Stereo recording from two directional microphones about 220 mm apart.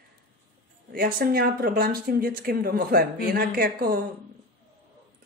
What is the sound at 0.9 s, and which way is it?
Speech, 40° right (ahead or behind).